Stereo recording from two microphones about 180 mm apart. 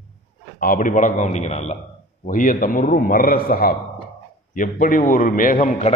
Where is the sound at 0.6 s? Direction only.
50° left (ahead or behind).